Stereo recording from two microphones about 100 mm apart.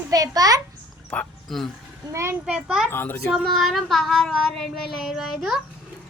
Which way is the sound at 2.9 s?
20° left (ahead or behind).